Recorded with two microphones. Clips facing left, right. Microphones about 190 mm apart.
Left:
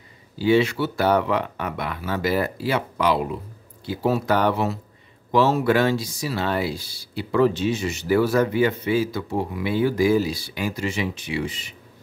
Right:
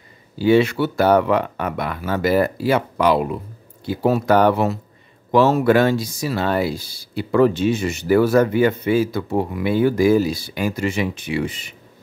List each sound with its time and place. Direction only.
0.4 s speech: 55° right (ahead or behind)